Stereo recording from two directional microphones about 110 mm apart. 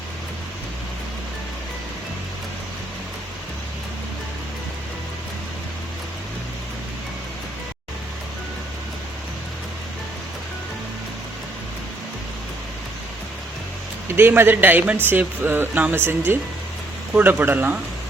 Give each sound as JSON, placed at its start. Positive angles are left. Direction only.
{"t": 14.2, "sound": "speech", "side_deg": -20}